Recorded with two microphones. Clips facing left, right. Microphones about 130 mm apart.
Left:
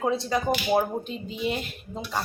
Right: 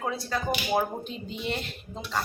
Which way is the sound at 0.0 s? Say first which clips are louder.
Left 5 dB; 20° left (ahead or behind).